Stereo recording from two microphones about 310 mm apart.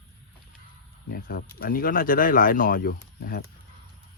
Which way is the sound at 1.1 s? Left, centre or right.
Left.